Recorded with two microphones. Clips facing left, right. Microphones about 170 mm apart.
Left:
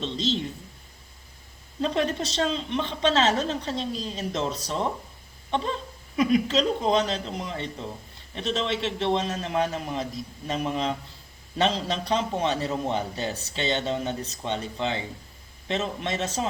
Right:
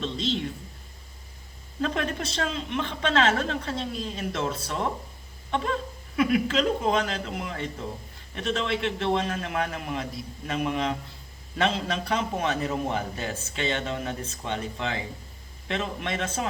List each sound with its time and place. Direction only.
0.0 s a woman's voice: 35° left (ahead or behind)
1.8 s a woman's voice: 30° left (ahead or behind)
5.5 s a sound: 30° left (ahead or behind)
6.1 s a woman's voice: 35° left (ahead or behind)